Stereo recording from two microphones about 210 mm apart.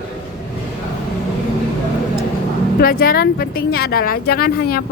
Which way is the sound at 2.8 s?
45° left (ahead or behind).